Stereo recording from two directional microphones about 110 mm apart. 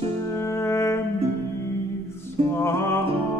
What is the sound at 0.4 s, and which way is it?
Brass instrument, 25° left (ahead or behind).